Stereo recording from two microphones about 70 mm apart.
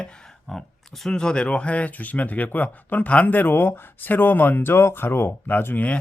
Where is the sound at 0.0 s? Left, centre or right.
Centre.